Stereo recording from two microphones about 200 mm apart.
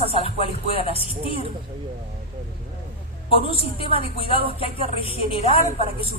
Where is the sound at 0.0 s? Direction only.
30° left (ahead or behind).